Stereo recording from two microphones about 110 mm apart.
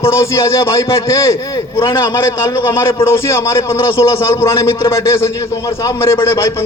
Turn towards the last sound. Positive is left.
turn(degrees=25)  # may be behind; listen again after turning